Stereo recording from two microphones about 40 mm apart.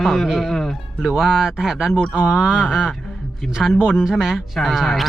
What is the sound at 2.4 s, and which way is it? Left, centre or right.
Speech, right.